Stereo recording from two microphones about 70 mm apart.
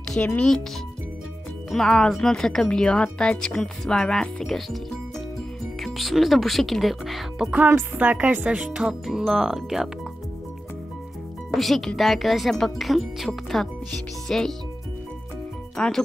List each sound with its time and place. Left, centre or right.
0.2 s speech: centre
1.7 s speech: centre
5.8 s speech: centre
7.6 s a woman's voice: right
8.5 s speech: centre
11.5 s speech: centre
15.8 s speech: centre